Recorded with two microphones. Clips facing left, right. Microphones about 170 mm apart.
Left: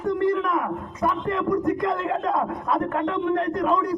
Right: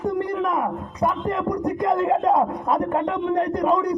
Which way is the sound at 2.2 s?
25° right (ahead or behind).